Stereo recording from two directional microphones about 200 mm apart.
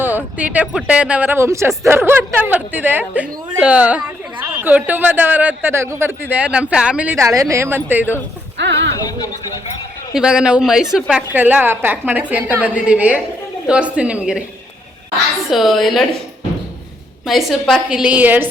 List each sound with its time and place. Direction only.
0.3 s a woman's voice: 5° right (ahead or behind)
8.5 s a sound: 65° right (ahead or behind)
8.9 s speech: 20° left (ahead or behind)
10.2 s a woman's voice: 5° right (ahead or behind)
15.4 s a woman's voice: centre (ahead or behind)
17.2 s a woman's voice: centre (ahead or behind)